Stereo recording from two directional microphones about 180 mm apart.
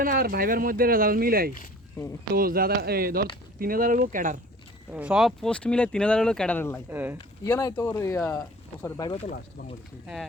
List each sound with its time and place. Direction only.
0.0 s speech: 50° right (ahead or behind)
4.9 s speech: 5° right (ahead or behind); by 6.8 s 10° left (ahead or behind)
6.9 s speech: 10° right (ahead or behind)
7.4 s speech: 15° left (ahead or behind)
9.0 s speech: 35° left (ahead or behind)